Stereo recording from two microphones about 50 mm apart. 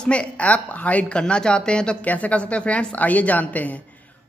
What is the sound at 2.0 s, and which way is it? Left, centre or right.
Speech, left.